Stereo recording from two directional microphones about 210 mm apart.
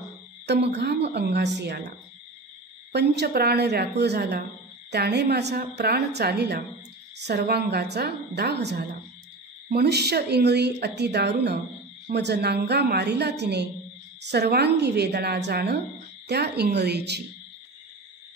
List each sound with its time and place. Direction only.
0.5 s a woman's voice: 55° right (ahead or behind)
2.9 s a woman's voice: 50° right (ahead or behind)